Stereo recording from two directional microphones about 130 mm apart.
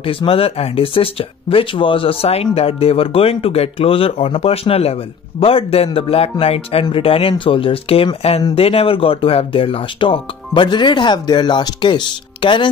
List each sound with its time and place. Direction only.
0.0 s speech: 45° left (ahead or behind)